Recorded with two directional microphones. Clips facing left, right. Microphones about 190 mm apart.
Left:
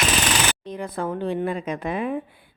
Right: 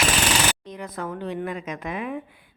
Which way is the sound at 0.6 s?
30° left (ahead or behind).